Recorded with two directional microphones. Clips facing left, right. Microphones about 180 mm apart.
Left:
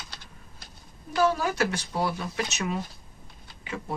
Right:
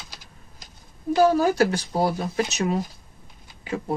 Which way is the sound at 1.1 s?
35° right (ahead or behind).